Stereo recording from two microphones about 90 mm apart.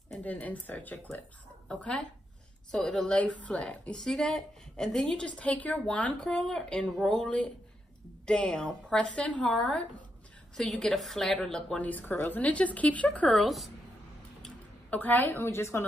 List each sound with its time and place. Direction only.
0.2 s a woman's voice: 20° left (ahead or behind)
11.8 s a woman's voice: 20° left (ahead or behind)
13.4 s a woman's voice: centre (ahead or behind)
14.4 s a sound: 15° left (ahead or behind)